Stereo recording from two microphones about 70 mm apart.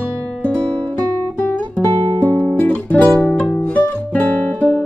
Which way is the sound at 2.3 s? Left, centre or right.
Left.